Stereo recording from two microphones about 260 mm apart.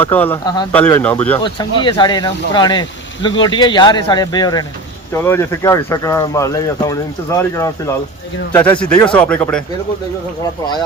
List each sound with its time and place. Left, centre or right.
0.0 s speech: centre
1.4 s speech: centre